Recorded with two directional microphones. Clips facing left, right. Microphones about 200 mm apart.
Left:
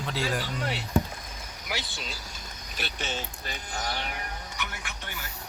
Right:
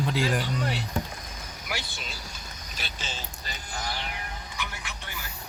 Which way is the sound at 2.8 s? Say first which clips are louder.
Left 5 dB; 60° left (ahead or behind).